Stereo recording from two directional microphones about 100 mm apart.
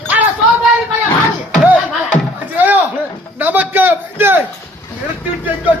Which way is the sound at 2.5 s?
15° right (ahead or behind).